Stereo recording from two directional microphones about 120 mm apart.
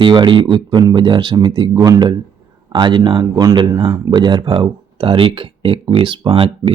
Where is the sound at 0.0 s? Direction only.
45° right (ahead or behind).